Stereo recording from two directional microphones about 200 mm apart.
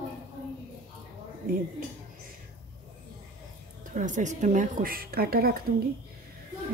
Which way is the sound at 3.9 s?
40° right (ahead or behind).